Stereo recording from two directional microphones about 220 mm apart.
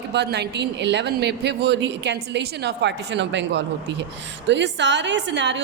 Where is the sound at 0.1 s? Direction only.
50° right (ahead or behind).